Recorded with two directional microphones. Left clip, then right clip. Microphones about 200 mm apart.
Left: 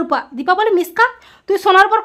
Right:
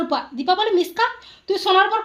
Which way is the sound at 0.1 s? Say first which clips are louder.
Left 5 dB; 25° left (ahead or behind).